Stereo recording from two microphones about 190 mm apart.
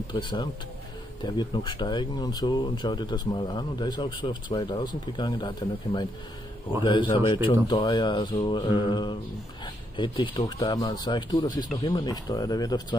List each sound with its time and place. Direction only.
0.1 s speech: 25° left (ahead or behind)